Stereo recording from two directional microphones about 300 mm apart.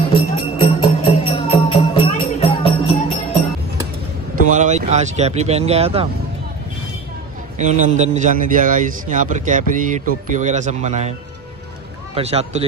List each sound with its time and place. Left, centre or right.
0.1 s jingle bell: centre
4.4 s speech: right
7.5 s a man's voice: right
12.2 s a man's voice: right